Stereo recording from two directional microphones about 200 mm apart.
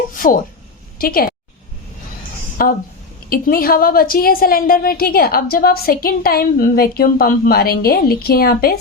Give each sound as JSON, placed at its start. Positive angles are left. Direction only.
{"t": 0.1, "sound": "a sound", "side_deg": 45}
{"t": 0.9, "sound": "a woman's voice", "side_deg": 45}
{"t": 2.6, "sound": "a woman's voice", "side_deg": 45}